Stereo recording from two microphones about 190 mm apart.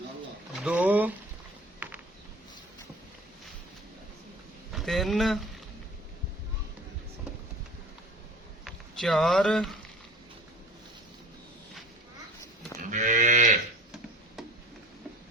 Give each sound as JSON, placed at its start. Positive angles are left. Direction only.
{"t": 0.6, "sound": "a sound", "side_deg": -5}
{"t": 4.7, "sound": "speech", "side_deg": 0}
{"t": 8.6, "sound": "speech", "side_deg": 0}
{"t": 12.8, "sound": "moo", "side_deg": -40}